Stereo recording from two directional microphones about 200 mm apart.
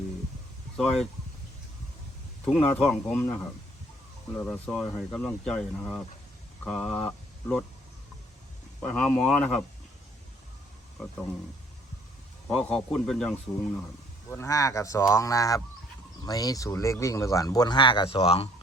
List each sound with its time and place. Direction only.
0.8 s speech: centre (ahead or behind)
2.4 s speech: 5° left (ahead or behind)
8.8 s speech: 5° left (ahead or behind)
12.5 s speech: 5° left (ahead or behind); by 18.4 s 30° left (ahead or behind)